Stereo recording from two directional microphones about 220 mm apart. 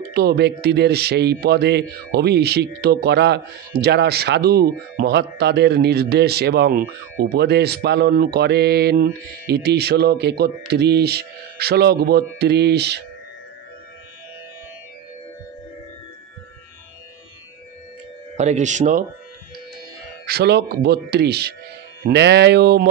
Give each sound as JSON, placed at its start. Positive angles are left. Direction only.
{"t": 0.1, "sound": "speech", "side_deg": -45}
{"t": 18.3, "sound": "speech", "side_deg": -30}
{"t": 20.2, "sound": "speech", "side_deg": -45}